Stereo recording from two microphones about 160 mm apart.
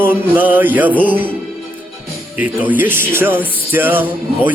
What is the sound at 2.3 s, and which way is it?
Music, 10° right (ahead or behind).